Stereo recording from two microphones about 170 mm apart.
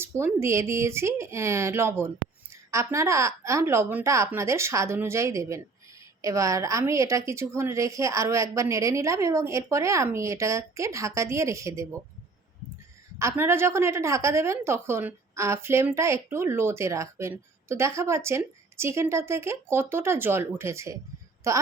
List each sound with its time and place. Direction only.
0.0 s a woman's voice: 15° right (ahead or behind)
13.1 s a woman's voice: 15° right (ahead or behind)